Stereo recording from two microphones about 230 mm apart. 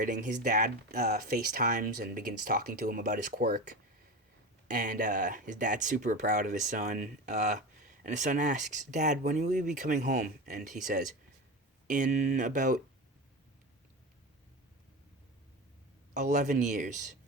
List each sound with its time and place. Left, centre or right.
0.0 s speech: right
4.7 s speech: right
16.1 s speech: right